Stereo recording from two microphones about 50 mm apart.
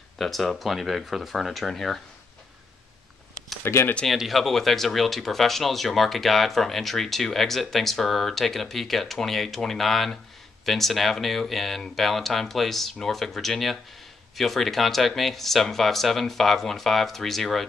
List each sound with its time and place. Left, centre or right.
0.2 s speech: centre
3.7 s speech: left
4.0 s speech: centre